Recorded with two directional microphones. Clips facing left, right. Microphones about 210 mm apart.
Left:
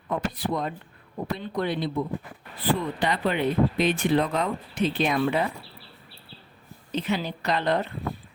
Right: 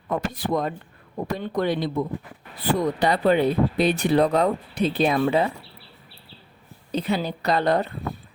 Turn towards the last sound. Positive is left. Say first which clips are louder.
# right 4 dB
turn(degrees=-40)  # may be behind; listen again after turning